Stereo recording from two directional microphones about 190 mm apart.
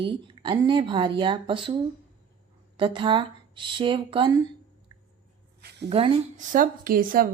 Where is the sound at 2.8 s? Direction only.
25° right (ahead or behind).